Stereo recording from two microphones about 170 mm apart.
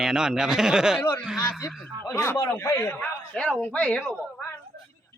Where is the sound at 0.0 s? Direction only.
5° right (ahead or behind).